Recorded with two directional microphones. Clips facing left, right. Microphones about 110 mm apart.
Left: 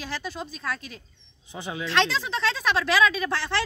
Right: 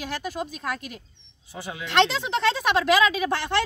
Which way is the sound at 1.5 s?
20° left (ahead or behind).